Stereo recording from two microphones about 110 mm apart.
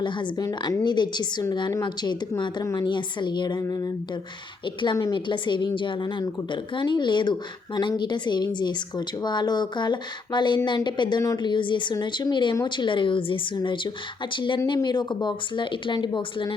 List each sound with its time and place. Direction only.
0.0 s a woman's voice: 45° left (ahead or behind)
0.4 s a woman's voice: 30° left (ahead or behind)
0.9 s a woman's voice: 40° left (ahead or behind)
4.6 s a woman's voice: 45° left (ahead or behind)